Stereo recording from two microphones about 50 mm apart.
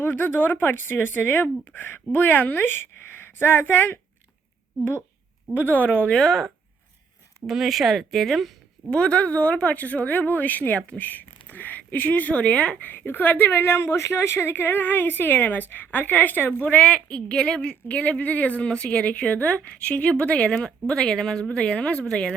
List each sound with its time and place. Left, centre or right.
0.0 s speech: left
5.5 s speech: left
6.2 s speech: centre
8.9 s speech: left
12.8 s speech: left
20.6 s speech: centre